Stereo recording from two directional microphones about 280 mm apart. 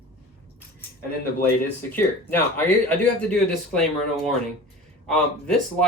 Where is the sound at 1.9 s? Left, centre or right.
Centre.